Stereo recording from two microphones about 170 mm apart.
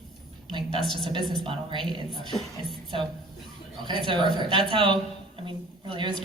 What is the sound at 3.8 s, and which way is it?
Speech, 30° right (ahead or behind).